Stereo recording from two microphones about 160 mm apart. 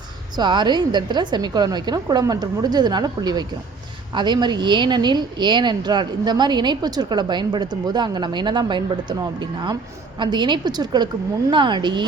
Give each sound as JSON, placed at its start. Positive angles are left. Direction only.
{"t": 0.3, "sound": "a woman's voice", "side_deg": -30}